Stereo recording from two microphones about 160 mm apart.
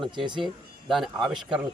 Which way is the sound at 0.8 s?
Centre (ahead or behind).